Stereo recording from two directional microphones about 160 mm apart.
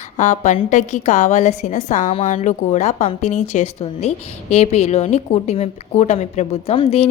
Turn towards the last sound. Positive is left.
turn(degrees=35)  # may be behind; listen again after turning